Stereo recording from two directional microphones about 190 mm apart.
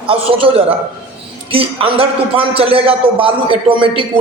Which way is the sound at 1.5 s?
30° right (ahead or behind).